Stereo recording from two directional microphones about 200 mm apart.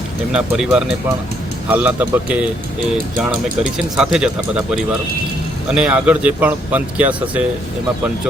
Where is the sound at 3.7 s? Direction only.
5° right (ahead or behind).